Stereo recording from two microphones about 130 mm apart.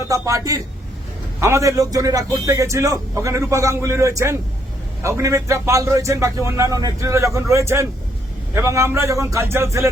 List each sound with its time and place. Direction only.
0.1 s a man's voice: 25° right (ahead or behind)